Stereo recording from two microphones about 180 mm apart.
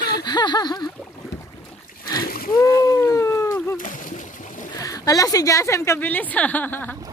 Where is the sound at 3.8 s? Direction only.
45° left (ahead or behind).